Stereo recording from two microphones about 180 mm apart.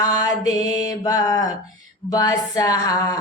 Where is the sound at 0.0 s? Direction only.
20° left (ahead or behind).